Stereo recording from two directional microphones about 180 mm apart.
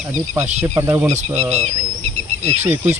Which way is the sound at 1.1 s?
40° right (ahead or behind).